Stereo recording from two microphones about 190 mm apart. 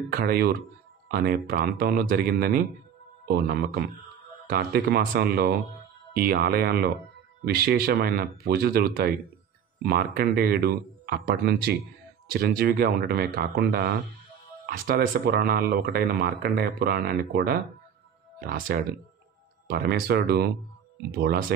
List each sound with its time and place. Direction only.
0.1 s speech: 55° right (ahead or behind)